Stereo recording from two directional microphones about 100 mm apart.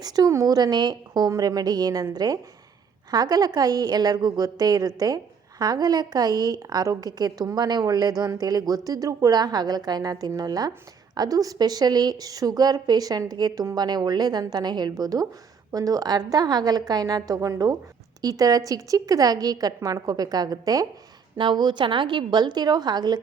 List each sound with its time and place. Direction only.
0.0 s a woman's voice: 40° right (ahead or behind)
21.3 s a woman's voice: 50° right (ahead or behind)